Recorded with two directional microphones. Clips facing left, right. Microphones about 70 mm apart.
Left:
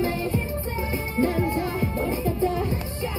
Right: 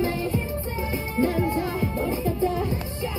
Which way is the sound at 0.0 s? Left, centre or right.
Left.